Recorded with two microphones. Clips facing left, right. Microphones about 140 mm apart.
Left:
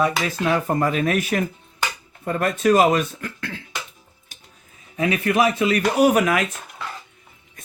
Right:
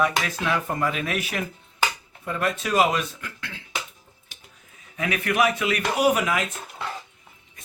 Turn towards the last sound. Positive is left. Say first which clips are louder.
# left 5 dB
turn(degrees=60)  # may be behind; listen again after turning